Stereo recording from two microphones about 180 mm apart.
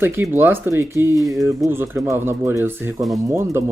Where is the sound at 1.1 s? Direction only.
Centre (ahead or behind).